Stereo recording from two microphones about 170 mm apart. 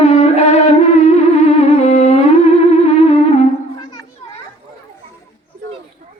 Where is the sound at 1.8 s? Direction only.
40° left (ahead or behind).